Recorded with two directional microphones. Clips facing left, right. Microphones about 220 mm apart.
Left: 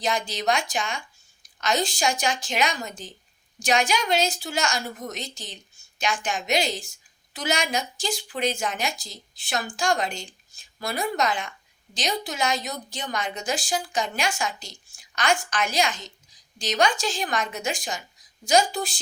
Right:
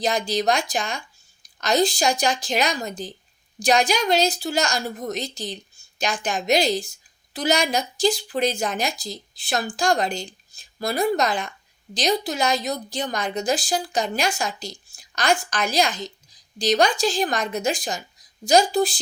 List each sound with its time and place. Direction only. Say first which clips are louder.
0.0 s a woman's voice: right 4 dB; 35° right (ahead or behind)